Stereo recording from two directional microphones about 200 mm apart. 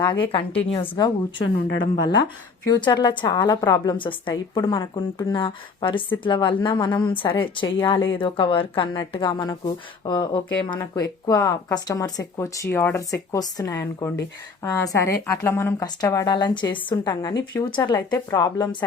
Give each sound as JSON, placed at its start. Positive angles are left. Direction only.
{"t": 0.0, "sound": "a woman's voice", "side_deg": 20}
{"t": 1.4, "sound": "speech", "side_deg": 60}
{"t": 1.8, "sound": "a woman's voice", "side_deg": 20}